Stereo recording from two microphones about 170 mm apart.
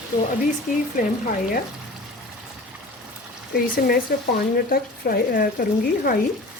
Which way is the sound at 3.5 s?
60° left (ahead or behind).